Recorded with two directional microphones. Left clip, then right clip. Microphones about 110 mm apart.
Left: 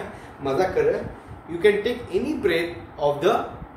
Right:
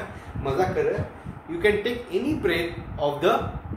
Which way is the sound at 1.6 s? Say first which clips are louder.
Left 3 dB; 35° right (ahead or behind).